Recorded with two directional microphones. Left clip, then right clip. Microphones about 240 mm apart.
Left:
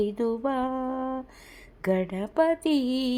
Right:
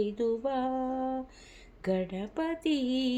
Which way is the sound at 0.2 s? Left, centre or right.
Left.